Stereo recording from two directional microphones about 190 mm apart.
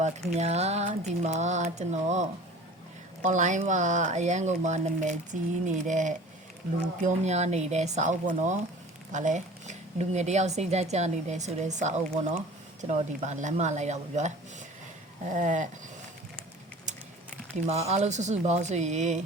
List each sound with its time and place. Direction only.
0.0 s speech: 35° right (ahead or behind)
16.9 s a sound: 40° right (ahead or behind)
17.7 s speech: 35° right (ahead or behind)